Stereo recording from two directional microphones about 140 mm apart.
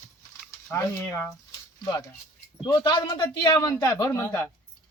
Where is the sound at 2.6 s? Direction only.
30° left (ahead or behind).